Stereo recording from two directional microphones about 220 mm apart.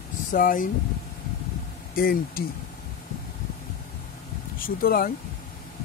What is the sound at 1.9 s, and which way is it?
Speech, 40° left (ahead or behind).